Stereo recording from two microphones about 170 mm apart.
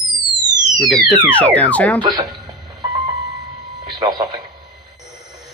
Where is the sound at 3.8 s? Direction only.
25° right (ahead or behind).